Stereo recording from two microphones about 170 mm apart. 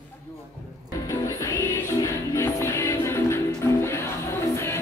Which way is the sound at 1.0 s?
20° left (ahead or behind).